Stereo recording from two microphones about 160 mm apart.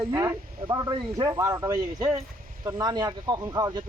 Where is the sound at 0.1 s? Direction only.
20° right (ahead or behind).